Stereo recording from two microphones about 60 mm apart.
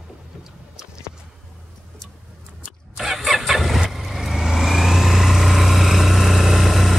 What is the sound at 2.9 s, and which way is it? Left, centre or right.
Vehicle, centre.